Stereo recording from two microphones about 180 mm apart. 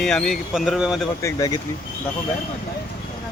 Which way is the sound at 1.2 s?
20° left (ahead or behind).